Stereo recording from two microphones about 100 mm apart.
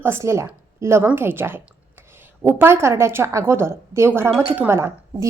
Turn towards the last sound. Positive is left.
turn(degrees=-25)  # may be behind; listen again after turning